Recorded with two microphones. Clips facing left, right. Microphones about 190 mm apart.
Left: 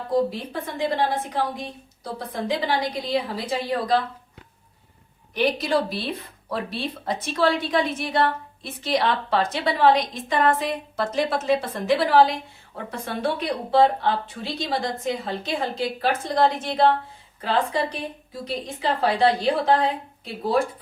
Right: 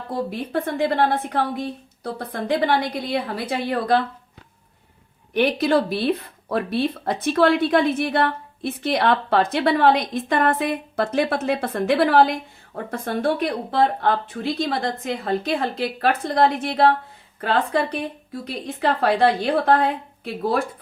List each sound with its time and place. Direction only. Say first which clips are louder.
0.3 s speech: right 6 dB; 65° right (ahead or behind)
5.3 s speech: right 4 dB; 60° right (ahead or behind)